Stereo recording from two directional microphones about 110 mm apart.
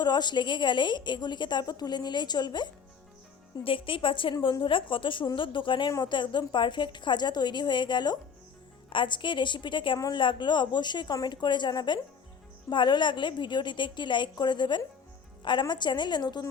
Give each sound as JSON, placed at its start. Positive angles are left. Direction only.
{"t": 0.0, "sound": "a woman's voice", "side_deg": 40}
{"t": 3.6, "sound": "a woman's voice", "side_deg": 55}